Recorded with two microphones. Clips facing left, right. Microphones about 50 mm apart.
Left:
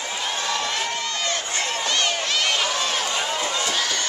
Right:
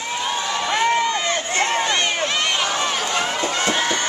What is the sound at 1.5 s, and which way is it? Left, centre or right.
Crowd, right.